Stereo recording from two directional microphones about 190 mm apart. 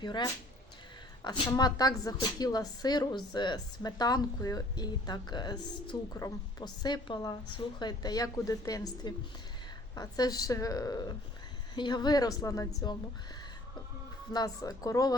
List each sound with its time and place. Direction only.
0.0 s speech: 25° left (ahead or behind)
14.3 s speech: 20° left (ahead or behind)